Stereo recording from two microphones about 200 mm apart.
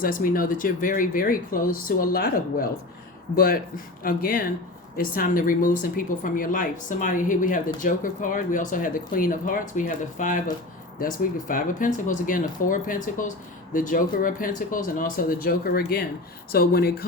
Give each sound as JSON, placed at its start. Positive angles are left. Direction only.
{"t": 0.0, "sound": "speech", "side_deg": 45}